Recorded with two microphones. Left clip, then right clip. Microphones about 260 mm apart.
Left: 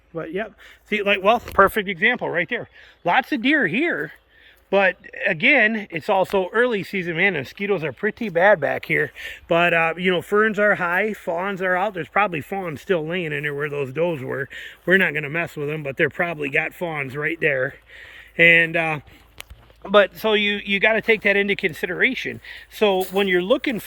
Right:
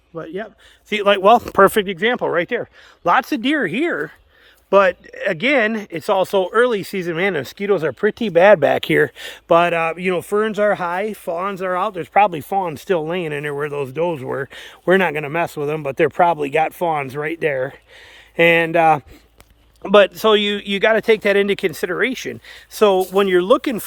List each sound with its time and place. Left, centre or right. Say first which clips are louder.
0.9 s speech: right 4 dB; centre
1.2 s speech: right 5 dB; right
9.5 s speech: right 3 dB; centre
19.8 s speech: right 4 dB; right